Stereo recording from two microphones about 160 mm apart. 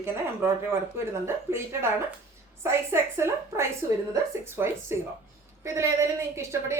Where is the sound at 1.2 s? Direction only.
15° right (ahead or behind).